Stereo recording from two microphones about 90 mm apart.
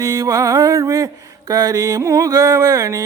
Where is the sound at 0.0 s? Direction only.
45° right (ahead or behind).